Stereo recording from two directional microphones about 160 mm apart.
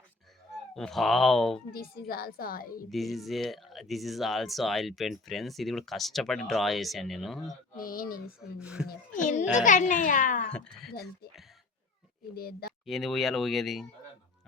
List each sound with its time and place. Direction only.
0.7 s speech: centre (ahead or behind)
1.7 s a woman's voice: 70° left (ahead or behind)
2.9 s speech: centre (ahead or behind)
7.8 s speech: 65° left (ahead or behind)
8.5 s speech: 5° right (ahead or behind)
8.9 s a child's voice: 50° left (ahead or behind)
10.5 s speech: 5° left (ahead or behind)
12.3 s a woman's voice: 75° left (ahead or behind)
12.8 s speech: centre (ahead or behind)